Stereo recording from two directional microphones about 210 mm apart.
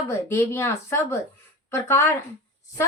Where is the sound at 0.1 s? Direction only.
10° left (ahead or behind).